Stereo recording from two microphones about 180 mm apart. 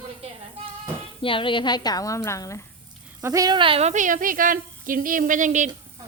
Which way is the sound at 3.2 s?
15° right (ahead or behind).